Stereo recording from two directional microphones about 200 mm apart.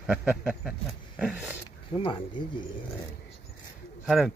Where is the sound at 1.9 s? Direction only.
25° left (ahead or behind).